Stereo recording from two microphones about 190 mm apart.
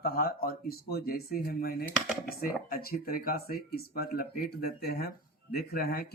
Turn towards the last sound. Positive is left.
turn(degrees=50)  # may be behind; listen again after turning